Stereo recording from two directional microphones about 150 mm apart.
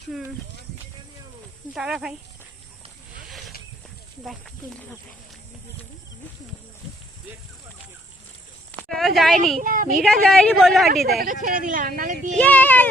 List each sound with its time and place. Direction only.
1.7 s speech: 5° right (ahead or behind)
8.9 s speech: centre (ahead or behind)
9.6 s speech: 60° right (ahead or behind)
10.0 s speech: centre (ahead or behind)
11.2 s speech: 65° right (ahead or behind)
12.4 s speech: 10° left (ahead or behind)